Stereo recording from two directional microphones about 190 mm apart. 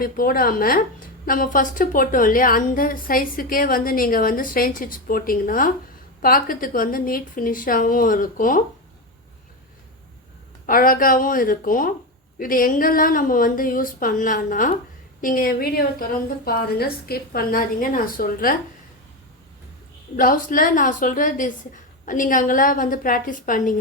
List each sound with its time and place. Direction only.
0.0 s a woman's voice: 50° left (ahead or behind)
10.7 s a woman's voice: 50° left (ahead or behind)
20.1 s a woman's voice: 45° left (ahead or behind)